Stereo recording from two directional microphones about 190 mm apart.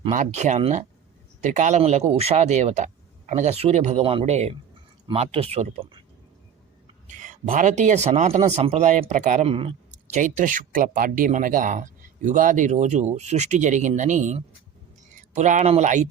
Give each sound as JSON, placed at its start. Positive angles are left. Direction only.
{"t": 0.1, "sound": "speech", "side_deg": -40}
{"t": 7.2, "sound": "speech", "side_deg": -40}